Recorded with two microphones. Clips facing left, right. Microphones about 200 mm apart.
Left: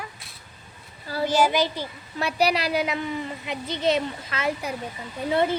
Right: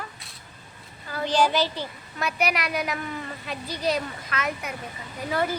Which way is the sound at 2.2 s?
30° left (ahead or behind).